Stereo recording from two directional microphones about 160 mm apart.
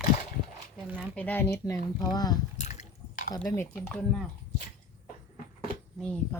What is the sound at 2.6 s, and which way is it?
Mechanisms, 45° left (ahead or behind).